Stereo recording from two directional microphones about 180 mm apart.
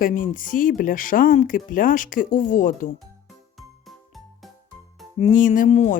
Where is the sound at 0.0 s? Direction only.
50° left (ahead or behind).